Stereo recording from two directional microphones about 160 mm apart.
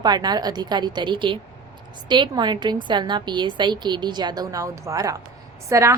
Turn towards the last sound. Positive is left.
turn(degrees=-20)  # may be behind; listen again after turning